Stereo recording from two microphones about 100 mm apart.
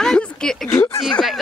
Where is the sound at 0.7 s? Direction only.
25° left (ahead or behind).